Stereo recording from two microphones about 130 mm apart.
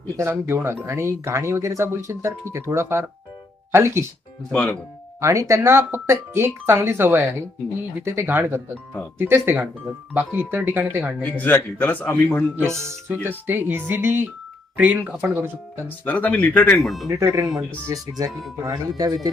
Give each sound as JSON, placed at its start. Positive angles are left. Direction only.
{"t": 0.2, "sound": "speech", "side_deg": -20}
{"t": 4.5, "sound": "a man's voice", "side_deg": 10}
{"t": 5.2, "sound": "speech", "side_deg": -25}
{"t": 11.2, "sound": "a man's voice", "side_deg": 15}
{"t": 12.5, "sound": "speech", "side_deg": -20}
{"t": 16.0, "sound": "a man's voice", "side_deg": 10}
{"t": 17.1, "sound": "speech", "side_deg": -20}
{"t": 17.4, "sound": "speech", "side_deg": 0}
{"t": 17.8, "sound": "speech", "side_deg": -25}